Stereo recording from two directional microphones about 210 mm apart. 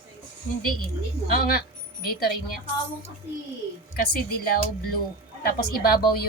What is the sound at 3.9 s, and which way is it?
Speech, 45° left (ahead or behind).